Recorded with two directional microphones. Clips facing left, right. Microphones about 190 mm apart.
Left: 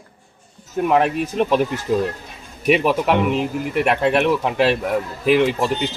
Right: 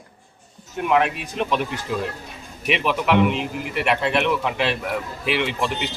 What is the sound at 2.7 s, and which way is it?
Speech, 40° left (ahead or behind).